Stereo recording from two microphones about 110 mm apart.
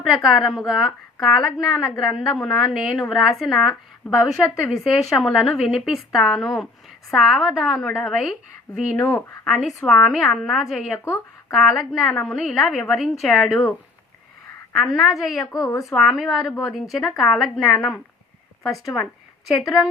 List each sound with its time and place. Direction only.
0.0 s a woman's voice: centre (ahead or behind)
9.0 s speech: 25° left (ahead or behind)
9.6 s speech: centre (ahead or behind)
10.9 s speech: 25° left (ahead or behind)
11.5 s speech: centre (ahead or behind)
14.9 s speech: centre (ahead or behind)
15.6 s speech: 30° left (ahead or behind)
15.9 s speech: centre (ahead or behind)